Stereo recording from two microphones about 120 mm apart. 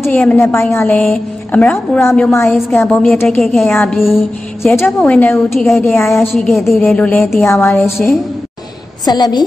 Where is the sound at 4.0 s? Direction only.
Centre (ahead or behind).